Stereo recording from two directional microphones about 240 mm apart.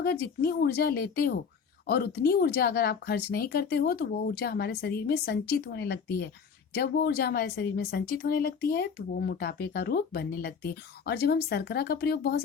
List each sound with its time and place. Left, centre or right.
0.0 s speech: left